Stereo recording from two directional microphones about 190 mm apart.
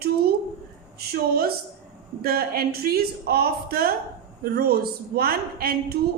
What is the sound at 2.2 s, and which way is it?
A woman's voice, 55° right (ahead or behind).